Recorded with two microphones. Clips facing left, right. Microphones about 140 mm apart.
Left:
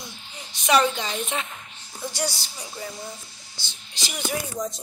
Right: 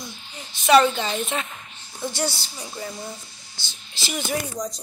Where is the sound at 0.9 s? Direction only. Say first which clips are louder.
Right 3 dB; 5° right (ahead or behind).